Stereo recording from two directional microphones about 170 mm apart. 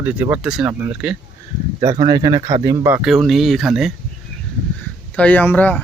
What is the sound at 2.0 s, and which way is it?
Speech, 25° right (ahead or behind).